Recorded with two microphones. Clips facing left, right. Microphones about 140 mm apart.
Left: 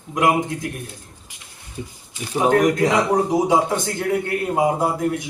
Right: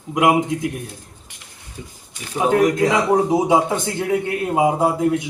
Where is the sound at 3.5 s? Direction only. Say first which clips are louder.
Right 1 dB; 10° right (ahead or behind).